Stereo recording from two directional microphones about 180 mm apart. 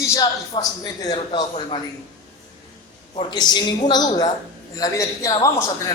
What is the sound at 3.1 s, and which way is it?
A man's voice, 25° left (ahead or behind).